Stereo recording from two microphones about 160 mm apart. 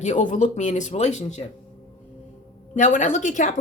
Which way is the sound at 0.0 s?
50° left (ahead or behind).